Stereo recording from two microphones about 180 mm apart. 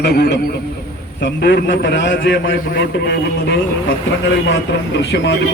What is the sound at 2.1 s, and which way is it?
A man's voice, 60° left (ahead or behind).